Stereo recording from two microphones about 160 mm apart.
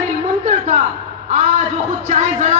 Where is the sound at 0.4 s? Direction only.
45° right (ahead or behind).